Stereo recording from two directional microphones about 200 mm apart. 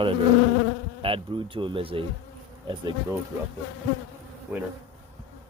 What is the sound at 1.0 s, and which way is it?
Speech, 25° right (ahead or behind).